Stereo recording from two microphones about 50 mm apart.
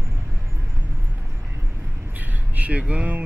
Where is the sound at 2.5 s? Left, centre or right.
Right.